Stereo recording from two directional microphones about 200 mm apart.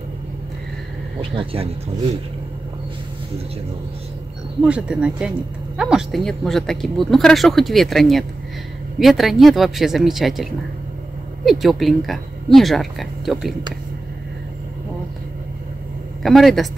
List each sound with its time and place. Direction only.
1.3 s speech: 25° right (ahead or behind)
4.6 s speech: 5° right (ahead or behind)
16.2 s speech: centre (ahead or behind)